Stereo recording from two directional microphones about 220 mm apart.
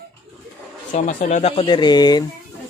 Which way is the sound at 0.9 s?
35° left (ahead or behind).